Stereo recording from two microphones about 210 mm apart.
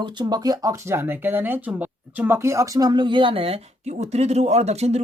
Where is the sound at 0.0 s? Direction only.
20° right (ahead or behind).